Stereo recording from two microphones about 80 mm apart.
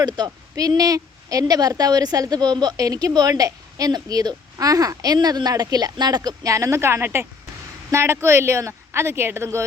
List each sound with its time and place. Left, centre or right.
0.0 s a woman's voice: right